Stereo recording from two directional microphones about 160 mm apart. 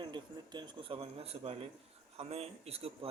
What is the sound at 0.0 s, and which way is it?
A man's voice, 30° right (ahead or behind).